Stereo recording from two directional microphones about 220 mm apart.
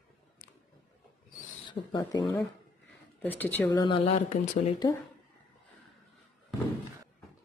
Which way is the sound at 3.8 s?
25° left (ahead or behind).